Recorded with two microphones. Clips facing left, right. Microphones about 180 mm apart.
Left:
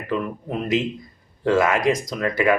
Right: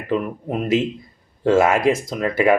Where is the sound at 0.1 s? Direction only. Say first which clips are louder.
Right 3 dB; 20° right (ahead or behind).